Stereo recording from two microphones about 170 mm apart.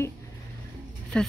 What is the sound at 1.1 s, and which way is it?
Speech, 5° left (ahead or behind).